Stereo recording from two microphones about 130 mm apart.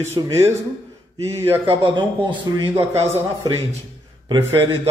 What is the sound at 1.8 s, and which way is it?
Speech, 40° right (ahead or behind).